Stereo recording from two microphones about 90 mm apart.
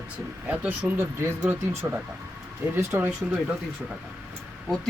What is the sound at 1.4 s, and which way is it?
Speech, 20° right (ahead or behind).